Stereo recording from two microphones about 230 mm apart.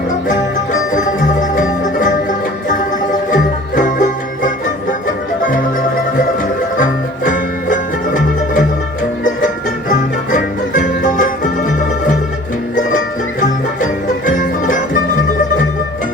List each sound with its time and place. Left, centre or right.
0.3 s music: left
6.7 s music: left
9.9 s music: left
13.4 s music: left